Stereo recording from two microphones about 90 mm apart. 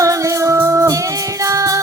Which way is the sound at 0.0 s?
35° right (ahead or behind).